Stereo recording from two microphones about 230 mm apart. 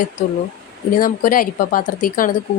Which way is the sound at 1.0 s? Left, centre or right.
Left.